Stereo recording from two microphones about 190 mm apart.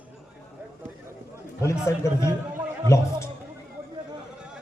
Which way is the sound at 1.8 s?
15° left (ahead or behind).